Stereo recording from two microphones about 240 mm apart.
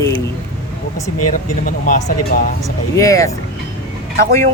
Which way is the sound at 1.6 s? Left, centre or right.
Left.